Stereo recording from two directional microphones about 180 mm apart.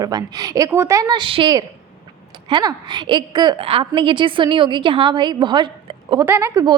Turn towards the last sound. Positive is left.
turn(degrees=-20)  # may be behind; listen again after turning